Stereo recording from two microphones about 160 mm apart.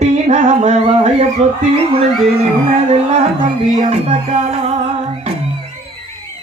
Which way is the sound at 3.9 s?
40° right (ahead or behind).